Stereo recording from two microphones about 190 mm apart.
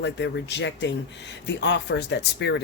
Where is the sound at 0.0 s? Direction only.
65° left (ahead or behind).